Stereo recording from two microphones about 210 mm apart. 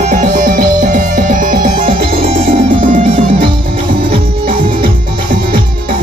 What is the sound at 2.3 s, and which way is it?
Music, 25° right (ahead or behind).